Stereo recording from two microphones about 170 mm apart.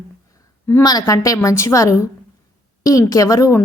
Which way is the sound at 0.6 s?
20° left (ahead or behind).